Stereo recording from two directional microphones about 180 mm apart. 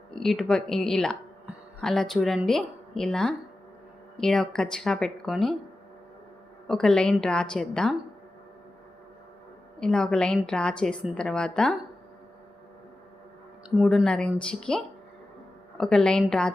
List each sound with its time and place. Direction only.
0.1 s a woman's voice: centre (ahead or behind)
6.7 s a woman's voice: 5° left (ahead or behind)
9.8 s a woman's voice: 5° left (ahead or behind)
13.7 s a woman's voice: centre (ahead or behind)
15.8 s a woman's voice: 5° left (ahead or behind)